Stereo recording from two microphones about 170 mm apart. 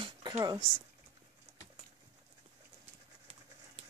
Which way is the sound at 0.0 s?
25° right (ahead or behind).